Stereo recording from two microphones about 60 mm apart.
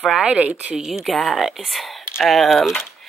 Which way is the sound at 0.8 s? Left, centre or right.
Centre.